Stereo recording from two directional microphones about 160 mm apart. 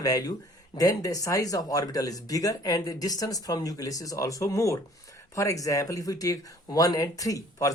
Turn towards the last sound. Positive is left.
turn(degrees=20)  # may be behind; listen again after turning